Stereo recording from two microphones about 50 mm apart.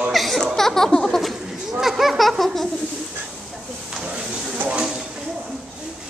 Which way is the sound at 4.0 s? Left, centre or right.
Centre.